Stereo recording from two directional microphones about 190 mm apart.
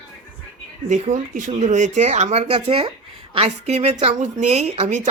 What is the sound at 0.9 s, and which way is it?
Speech, 40° right (ahead or behind).